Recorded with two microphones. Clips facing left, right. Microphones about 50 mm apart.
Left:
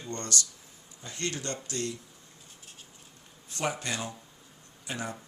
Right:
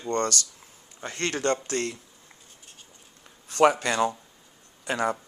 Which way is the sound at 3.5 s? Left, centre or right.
Right.